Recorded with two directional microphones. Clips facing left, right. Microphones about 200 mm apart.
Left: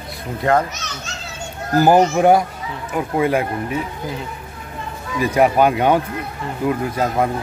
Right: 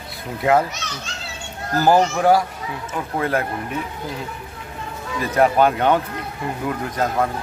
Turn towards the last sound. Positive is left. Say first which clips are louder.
# left 2 dB
turn(degrees=10)  # may be behind; listen again after turning